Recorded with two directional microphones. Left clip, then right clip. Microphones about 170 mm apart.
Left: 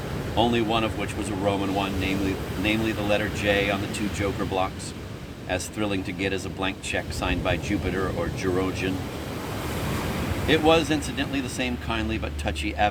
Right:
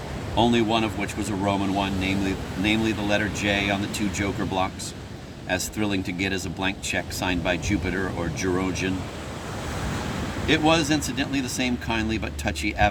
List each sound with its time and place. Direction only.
0.3 s speech: 50° right (ahead or behind)
10.4 s speech: 45° right (ahead or behind)